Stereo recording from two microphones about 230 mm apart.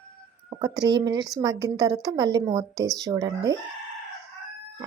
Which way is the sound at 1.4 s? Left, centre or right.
Centre.